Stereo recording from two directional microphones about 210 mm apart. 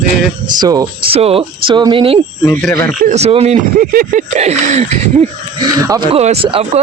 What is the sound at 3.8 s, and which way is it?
Speech, 45° right (ahead or behind).